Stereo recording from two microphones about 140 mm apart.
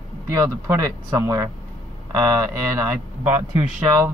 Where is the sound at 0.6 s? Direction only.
25° right (ahead or behind).